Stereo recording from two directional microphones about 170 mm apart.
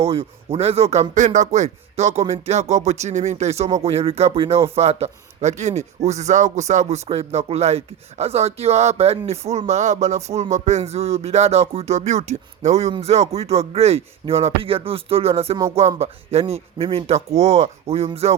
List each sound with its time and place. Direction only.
0.0 s speech: 35° right (ahead or behind)